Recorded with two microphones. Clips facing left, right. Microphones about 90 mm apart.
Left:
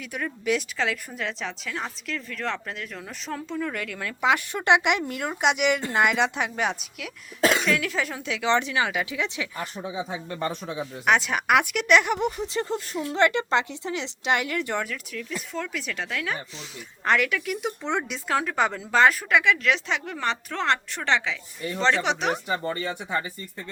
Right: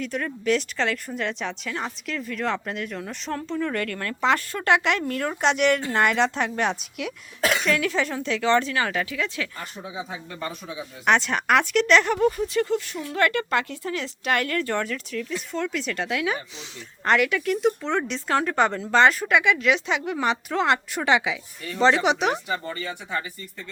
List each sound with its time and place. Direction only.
0.0 s a woman's voice: 5° left (ahead or behind)
8.4 s speech: 15° left (ahead or behind)
11.0 s speech: 5° left (ahead or behind); by 12.6 s 20° left (ahead or behind)
12.6 s speech: 35° left (ahead or behind); by 14.8 s 15° left (ahead or behind)
14.8 s a woman's voice: 5° left (ahead or behind)
22.4 s speech: 25° left (ahead or behind)